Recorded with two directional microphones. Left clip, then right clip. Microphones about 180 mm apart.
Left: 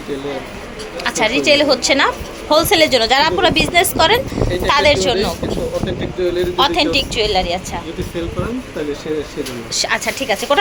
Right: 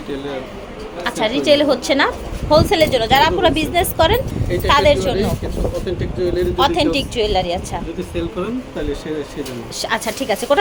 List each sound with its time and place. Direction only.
1.0 s a woman's voice: 10° right (ahead or behind)
6.3 s a woman's voice: 15° right (ahead or behind)
9.7 s a woman's voice: 10° right (ahead or behind)